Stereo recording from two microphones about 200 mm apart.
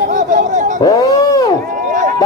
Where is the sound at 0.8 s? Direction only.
20° left (ahead or behind).